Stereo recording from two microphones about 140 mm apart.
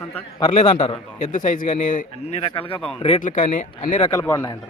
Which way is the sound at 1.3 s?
70° left (ahead or behind).